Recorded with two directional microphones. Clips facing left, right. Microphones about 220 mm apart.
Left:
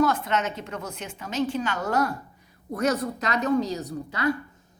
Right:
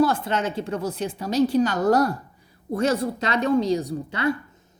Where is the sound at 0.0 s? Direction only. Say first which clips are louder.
Right 2 dB; 30° right (ahead or behind).